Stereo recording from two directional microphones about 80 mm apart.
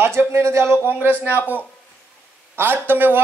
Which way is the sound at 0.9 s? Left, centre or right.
Right.